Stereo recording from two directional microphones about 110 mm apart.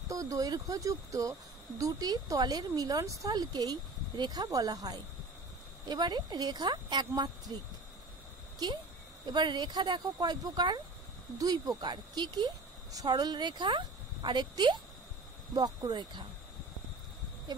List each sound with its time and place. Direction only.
0.1 s speech: 30° right (ahead or behind)
9.2 s a woman's voice: 40° right (ahead or behind)
17.5 s speech: 40° right (ahead or behind)